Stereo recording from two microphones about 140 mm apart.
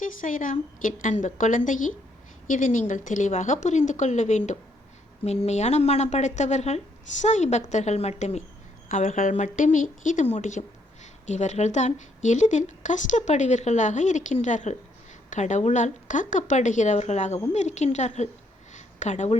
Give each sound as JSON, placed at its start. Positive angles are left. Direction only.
{"t": 0.0, "sound": "a woman's voice", "side_deg": 70}
{"t": 8.9, "sound": "speech", "side_deg": 70}
{"t": 18.7, "sound": "a sound", "side_deg": 60}